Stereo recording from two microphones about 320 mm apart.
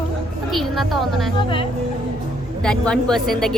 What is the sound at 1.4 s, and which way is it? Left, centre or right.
Speech, centre.